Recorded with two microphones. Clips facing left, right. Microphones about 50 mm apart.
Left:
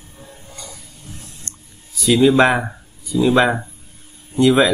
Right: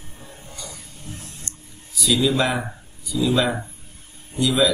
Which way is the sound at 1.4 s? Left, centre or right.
Left.